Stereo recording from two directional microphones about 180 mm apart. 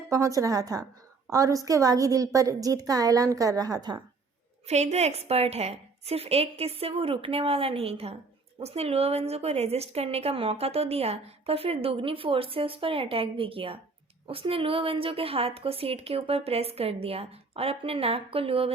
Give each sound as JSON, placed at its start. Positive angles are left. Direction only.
{"t": 0.1, "sound": "a woman's voice", "side_deg": -20}
{"t": 4.7, "sound": "a woman's voice", "side_deg": -40}